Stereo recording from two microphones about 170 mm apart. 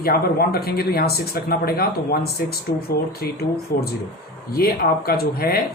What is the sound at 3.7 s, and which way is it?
Speech, 60° left (ahead or behind).